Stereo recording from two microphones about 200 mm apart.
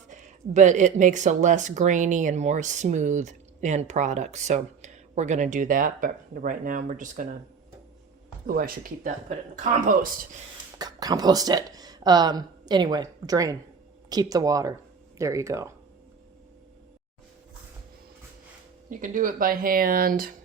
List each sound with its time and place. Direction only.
0.1 s speech: 40° right (ahead or behind)
8.4 s speech: 45° right (ahead or behind)
10.8 s speech: 20° right (ahead or behind)
18.9 s speech: 40° right (ahead or behind)